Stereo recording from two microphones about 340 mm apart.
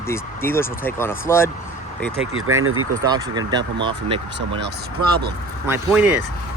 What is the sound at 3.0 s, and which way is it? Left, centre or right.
Speech, centre.